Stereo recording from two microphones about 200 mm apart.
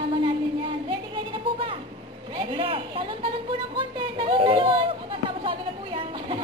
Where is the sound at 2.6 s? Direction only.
25° right (ahead or behind).